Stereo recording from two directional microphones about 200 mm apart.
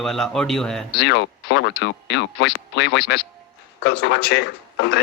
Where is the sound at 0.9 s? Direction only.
60° left (ahead or behind).